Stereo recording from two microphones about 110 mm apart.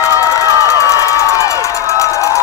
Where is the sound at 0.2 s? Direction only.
30° left (ahead or behind).